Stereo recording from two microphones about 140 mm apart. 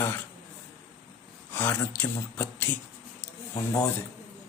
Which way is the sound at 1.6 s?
15° left (ahead or behind).